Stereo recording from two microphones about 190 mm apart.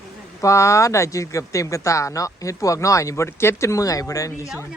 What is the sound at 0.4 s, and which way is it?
Speech, 15° left (ahead or behind).